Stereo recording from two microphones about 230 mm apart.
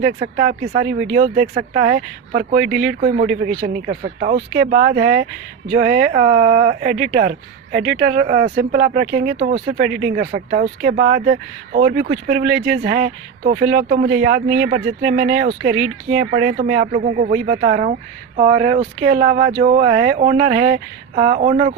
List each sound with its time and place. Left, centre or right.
0.0 s speech: right